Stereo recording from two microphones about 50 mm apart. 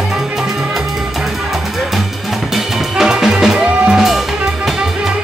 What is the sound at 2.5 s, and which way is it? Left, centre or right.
Music, centre.